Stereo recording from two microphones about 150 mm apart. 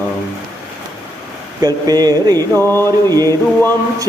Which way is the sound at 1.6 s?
25° right (ahead or behind).